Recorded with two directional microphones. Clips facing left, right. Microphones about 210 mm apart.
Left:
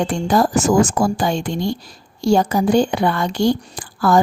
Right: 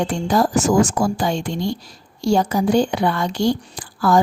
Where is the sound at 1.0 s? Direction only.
55° left (ahead or behind).